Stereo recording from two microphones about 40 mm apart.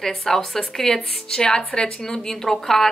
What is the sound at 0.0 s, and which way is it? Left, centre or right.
A woman's voice, centre.